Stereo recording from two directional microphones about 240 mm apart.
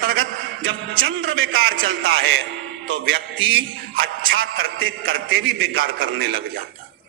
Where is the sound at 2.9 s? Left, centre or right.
Right.